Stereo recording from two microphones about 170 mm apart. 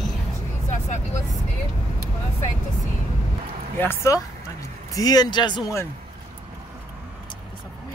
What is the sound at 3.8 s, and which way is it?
Speech, 15° left (ahead or behind).